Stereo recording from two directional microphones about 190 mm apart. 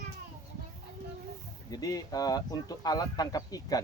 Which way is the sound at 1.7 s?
20° left (ahead or behind).